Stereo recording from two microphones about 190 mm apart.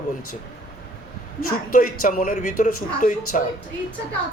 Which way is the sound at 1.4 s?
45° left (ahead or behind).